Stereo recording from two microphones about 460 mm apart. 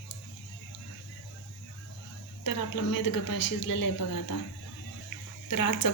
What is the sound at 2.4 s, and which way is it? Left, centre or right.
Speech, left.